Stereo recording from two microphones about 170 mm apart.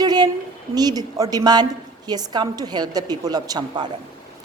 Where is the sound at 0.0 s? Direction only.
25° right (ahead or behind).